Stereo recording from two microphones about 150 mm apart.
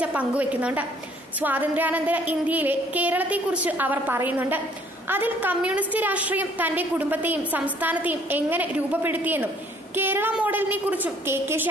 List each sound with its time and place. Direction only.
0.0 s a woman's voice: 10° right (ahead or behind)